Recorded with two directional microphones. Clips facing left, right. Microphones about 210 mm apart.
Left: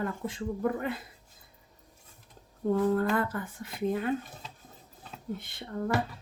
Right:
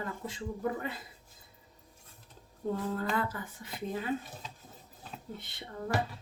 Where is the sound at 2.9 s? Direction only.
50° left (ahead or behind).